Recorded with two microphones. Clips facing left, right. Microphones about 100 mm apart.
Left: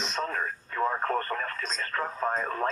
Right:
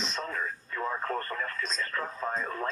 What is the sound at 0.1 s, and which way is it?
Radio, 45° left (ahead or behind).